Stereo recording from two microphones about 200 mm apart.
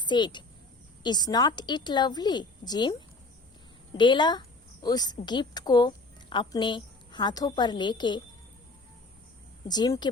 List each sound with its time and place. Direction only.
0.0 s a woman's voice: 20° left (ahead or behind)
3.9 s a woman's voice: 25° left (ahead or behind)
9.6 s a woman's voice: 20° left (ahead or behind)